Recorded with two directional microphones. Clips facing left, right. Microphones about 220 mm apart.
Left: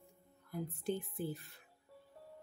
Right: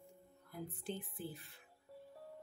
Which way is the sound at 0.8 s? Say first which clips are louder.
Left 7 dB; 45° left (ahead or behind).